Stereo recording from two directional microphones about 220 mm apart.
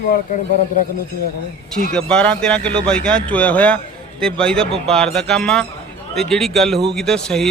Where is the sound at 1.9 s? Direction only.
5° left (ahead or behind).